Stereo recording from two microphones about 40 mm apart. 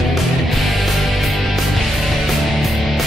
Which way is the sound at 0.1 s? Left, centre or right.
Centre.